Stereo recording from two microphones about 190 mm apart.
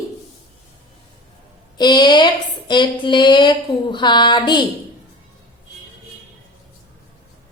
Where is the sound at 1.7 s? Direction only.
20° left (ahead or behind).